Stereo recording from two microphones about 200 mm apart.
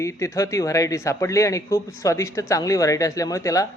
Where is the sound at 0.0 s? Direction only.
15° left (ahead or behind).